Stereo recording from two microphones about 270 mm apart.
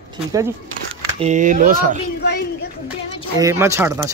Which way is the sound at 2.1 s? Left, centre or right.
Left.